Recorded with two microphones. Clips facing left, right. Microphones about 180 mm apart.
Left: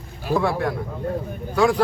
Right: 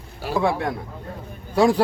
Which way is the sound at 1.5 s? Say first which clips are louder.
Right 1 dB; 35° right (ahead or behind).